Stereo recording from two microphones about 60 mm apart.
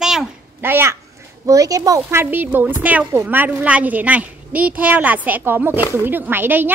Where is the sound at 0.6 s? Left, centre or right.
Right.